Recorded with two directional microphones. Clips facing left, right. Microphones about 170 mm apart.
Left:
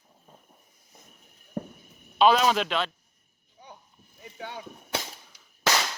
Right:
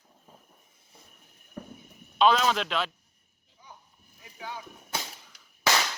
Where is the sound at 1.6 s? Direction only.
40° left (ahead or behind).